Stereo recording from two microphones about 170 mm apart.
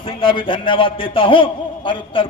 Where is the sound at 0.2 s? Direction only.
30° left (ahead or behind).